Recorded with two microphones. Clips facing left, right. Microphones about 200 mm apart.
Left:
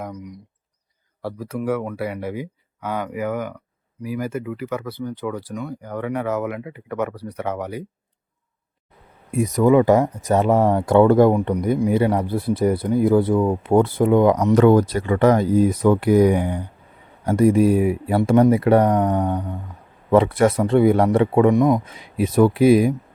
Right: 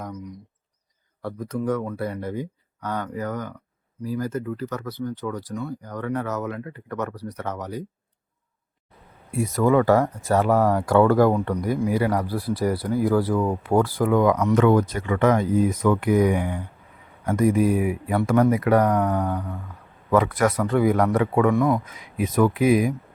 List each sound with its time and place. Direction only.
0.0 s speech: 10° left (ahead or behind)
9.3 s speech: 20° left (ahead or behind)
21.8 s speech: 30° left (ahead or behind)